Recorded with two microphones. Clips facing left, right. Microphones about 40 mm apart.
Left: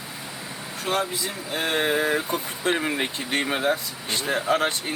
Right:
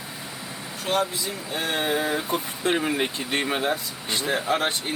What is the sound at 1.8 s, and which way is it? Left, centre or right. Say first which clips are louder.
Vehicle: left 2 dB; left.